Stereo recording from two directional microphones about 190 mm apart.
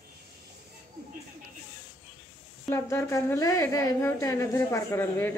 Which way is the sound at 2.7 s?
15° left (ahead or behind).